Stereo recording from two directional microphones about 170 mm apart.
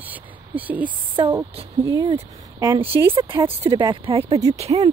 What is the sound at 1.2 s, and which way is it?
Speech, 30° right (ahead or behind).